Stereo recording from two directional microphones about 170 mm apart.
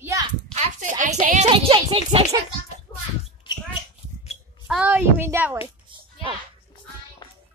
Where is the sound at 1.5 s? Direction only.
30° right (ahead or behind).